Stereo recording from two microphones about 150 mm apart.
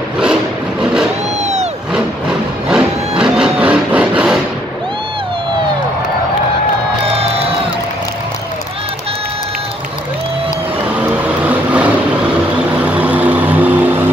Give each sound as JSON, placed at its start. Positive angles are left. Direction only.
{"t": 0.2, "sound": "a sound", "side_deg": -5}
{"t": 1.4, "sound": "vehicle", "side_deg": -50}
{"t": 2.0, "sound": "vehicle", "side_deg": -5}
{"t": 11.0, "sound": "vehicle", "side_deg": -10}